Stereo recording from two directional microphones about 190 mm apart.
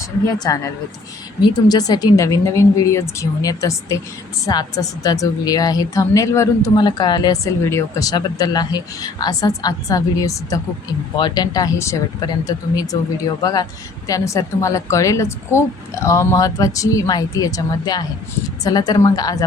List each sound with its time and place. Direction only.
0.3 s a woman's voice: 20° left (ahead or behind)
1.6 s a woman's voice: 20° left (ahead or behind)